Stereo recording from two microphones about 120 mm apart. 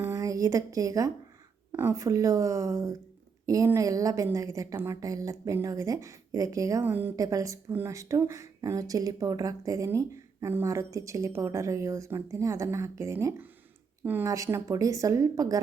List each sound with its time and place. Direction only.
0.0 s a sound: 25° right (ahead or behind)
1.7 s speech: 25° right (ahead or behind)
7.2 s speech: 30° right (ahead or behind)
14.3 s speech: 25° right (ahead or behind)